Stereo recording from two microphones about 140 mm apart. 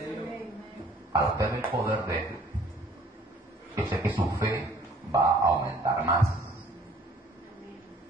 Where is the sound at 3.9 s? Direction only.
15° right (ahead or behind).